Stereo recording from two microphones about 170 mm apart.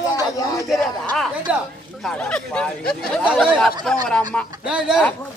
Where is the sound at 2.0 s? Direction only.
5° left (ahead or behind).